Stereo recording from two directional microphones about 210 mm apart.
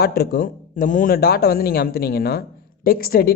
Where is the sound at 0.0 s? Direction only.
45° left (ahead or behind).